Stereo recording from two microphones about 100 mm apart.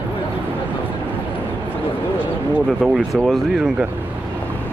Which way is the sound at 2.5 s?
5° right (ahead or behind).